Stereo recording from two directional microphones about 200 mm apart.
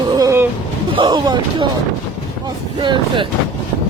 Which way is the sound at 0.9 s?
25° right (ahead or behind).